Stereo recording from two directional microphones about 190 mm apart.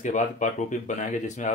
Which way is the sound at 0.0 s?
40° left (ahead or behind).